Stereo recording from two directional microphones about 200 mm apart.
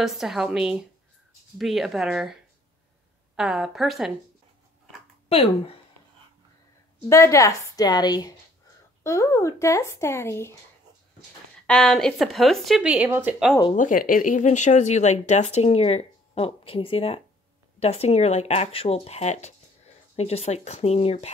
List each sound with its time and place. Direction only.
0.0 s speech: centre (ahead or behind)
3.3 s speech: 5° right (ahead or behind)
7.1 s a woman's voice: 15° left (ahead or behind)
11.6 s speech: 5° left (ahead or behind)
13.7 s speech: 40° left (ahead or behind)